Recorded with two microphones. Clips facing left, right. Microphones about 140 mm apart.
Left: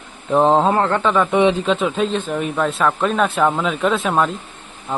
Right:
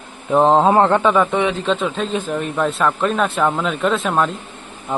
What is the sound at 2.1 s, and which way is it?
A man's voice, 5° right (ahead or behind).